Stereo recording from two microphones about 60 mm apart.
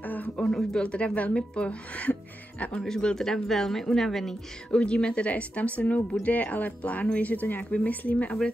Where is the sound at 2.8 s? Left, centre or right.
Centre.